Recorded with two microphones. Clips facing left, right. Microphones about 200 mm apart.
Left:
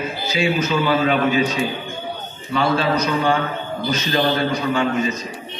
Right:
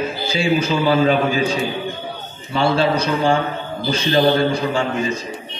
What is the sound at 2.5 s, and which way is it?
A man's voice, 30° right (ahead or behind).